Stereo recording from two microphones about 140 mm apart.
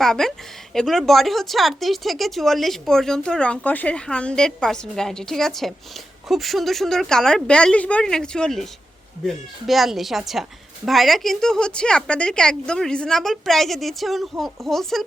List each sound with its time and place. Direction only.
0.0 s a woman's voice: 5° left (ahead or behind)